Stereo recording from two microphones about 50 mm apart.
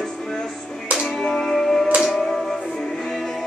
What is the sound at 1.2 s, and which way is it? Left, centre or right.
Music, centre.